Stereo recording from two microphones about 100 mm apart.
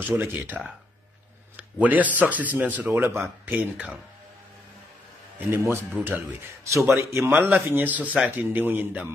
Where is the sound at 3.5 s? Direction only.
10° right (ahead or behind).